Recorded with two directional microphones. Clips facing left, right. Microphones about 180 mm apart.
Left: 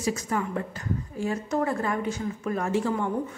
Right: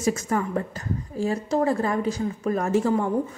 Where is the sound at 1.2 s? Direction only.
35° right (ahead or behind).